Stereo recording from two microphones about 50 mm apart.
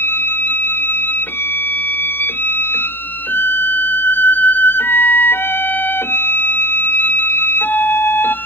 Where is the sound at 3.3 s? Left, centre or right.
Left.